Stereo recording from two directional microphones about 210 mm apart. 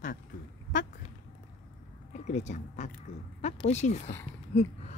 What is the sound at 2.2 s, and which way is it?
Speech, 35° left (ahead or behind).